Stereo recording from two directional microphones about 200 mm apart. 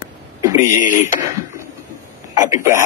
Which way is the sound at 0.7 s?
40° left (ahead or behind).